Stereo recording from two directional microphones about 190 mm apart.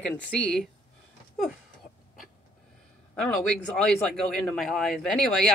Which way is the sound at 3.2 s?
5° left (ahead or behind).